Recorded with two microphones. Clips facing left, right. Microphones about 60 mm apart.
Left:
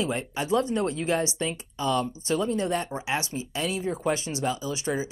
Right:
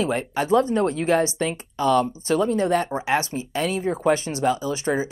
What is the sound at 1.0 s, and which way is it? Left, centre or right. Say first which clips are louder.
Speech: right 6 dB; right.